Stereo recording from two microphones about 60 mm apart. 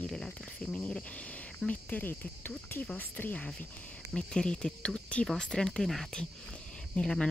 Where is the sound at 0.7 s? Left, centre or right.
Left.